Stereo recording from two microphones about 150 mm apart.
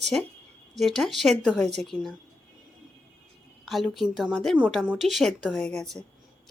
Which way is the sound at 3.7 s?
Centre (ahead or behind).